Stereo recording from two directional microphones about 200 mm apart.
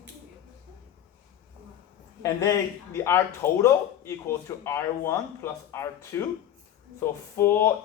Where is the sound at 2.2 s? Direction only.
15° left (ahead or behind).